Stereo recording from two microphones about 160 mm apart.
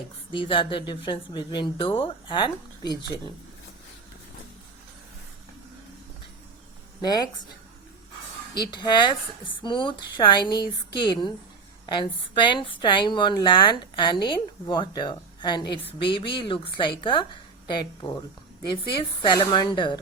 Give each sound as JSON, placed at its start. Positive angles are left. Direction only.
{"t": 0.3, "sound": "a woman's voice", "side_deg": 30}
{"t": 7.0, "sound": "a woman's voice", "side_deg": 25}
{"t": 8.7, "sound": "a woman's voice", "side_deg": 30}
{"t": 19.2, "sound": "a woman's voice", "side_deg": 30}